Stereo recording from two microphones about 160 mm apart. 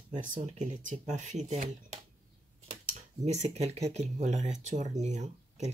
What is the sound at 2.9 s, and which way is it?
Speech, 45° right (ahead or behind).